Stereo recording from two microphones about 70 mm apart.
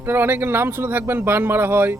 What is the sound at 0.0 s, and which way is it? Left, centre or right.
Speech, right.